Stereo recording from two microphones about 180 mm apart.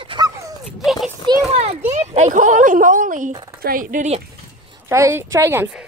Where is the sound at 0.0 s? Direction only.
30° right (ahead or behind).